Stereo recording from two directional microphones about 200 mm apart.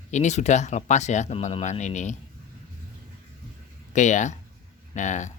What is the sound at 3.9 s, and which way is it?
Speech, 35° left (ahead or behind).